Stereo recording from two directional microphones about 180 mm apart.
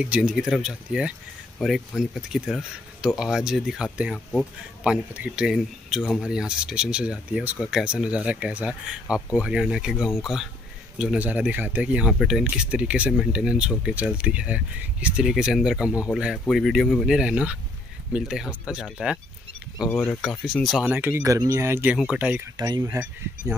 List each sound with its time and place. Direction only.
0.0 s speech: 5° right (ahead or behind)
5.1 s speech: 5° right (ahead or behind)
19.9 s speech: 10° left (ahead or behind)
20.4 s speech: centre (ahead or behind)
21.9 s speech: 5° right (ahead or behind)
22.6 s speech: 20° right (ahead or behind)